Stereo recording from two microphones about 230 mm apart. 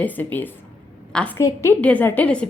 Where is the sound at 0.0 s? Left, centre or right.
Centre.